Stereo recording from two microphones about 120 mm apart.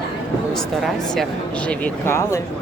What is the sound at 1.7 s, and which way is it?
Speech, 15° left (ahead or behind).